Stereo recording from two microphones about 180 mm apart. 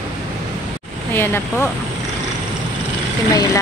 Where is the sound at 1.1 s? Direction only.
10° left (ahead or behind).